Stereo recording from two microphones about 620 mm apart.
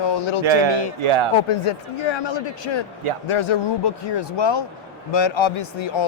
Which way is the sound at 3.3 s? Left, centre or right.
Left.